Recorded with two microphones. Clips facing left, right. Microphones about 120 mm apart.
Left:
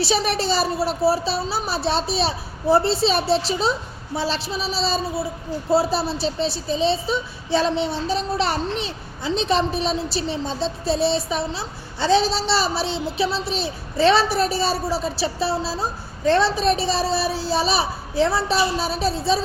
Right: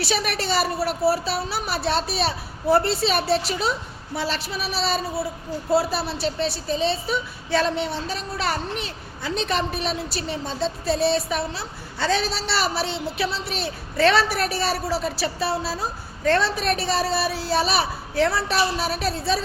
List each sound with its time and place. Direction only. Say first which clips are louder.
0.0 s a child's voice: left 4 dB; 25° left (ahead or behind)
6.1 s a woman's voice: left 1 dB; 55° right (ahead or behind)
7.1 s a child's voice: left 2 dB; 25° left (ahead or behind)